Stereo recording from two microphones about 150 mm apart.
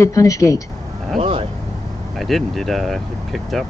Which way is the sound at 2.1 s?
Centre (ahead or behind).